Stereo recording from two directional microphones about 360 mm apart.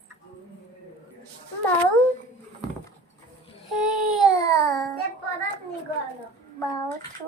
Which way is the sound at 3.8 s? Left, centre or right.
Centre.